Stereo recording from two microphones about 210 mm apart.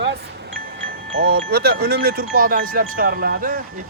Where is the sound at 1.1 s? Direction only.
45° right (ahead or behind).